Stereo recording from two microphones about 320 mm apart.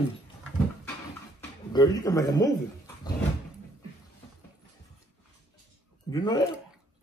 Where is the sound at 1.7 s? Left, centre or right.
Centre.